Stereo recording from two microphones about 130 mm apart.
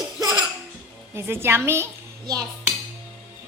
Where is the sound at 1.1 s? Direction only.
20° right (ahead or behind).